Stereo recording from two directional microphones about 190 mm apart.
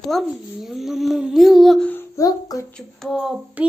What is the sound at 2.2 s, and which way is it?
Speech, 20° left (ahead or behind).